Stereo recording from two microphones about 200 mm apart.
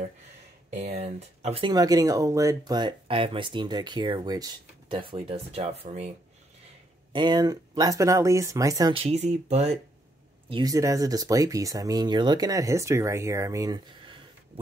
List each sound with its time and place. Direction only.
0.7 s speech: 35° right (ahead or behind)
7.1 s speech: 20° right (ahead or behind)
10.5 s speech: 20° right (ahead or behind)